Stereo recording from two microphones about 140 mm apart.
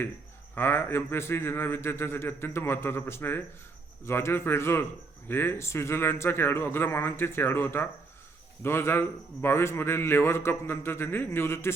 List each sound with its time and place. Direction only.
0.5 s a man's voice: 15° left (ahead or behind)